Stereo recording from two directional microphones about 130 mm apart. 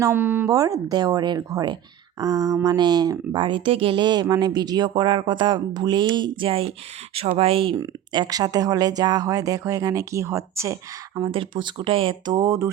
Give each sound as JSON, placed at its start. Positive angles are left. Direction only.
{"t": 0.0, "sound": "speech", "side_deg": -15}
{"t": 0.5, "sound": "speech", "side_deg": -25}
{"t": 7.8, "sound": "speech", "side_deg": -30}
{"t": 11.1, "sound": "speech", "side_deg": -40}